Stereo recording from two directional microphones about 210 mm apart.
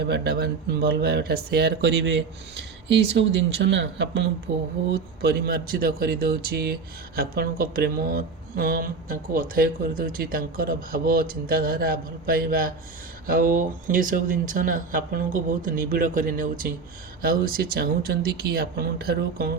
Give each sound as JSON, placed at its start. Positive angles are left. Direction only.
{"t": 0.0, "sound": "speech", "side_deg": -50}